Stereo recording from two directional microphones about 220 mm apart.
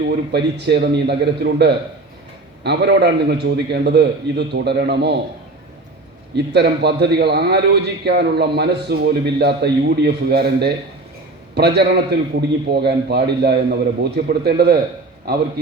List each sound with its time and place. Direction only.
0.0 s a man's voice: 50° right (ahead or behind)
6.3 s a man's voice: 50° right (ahead or behind)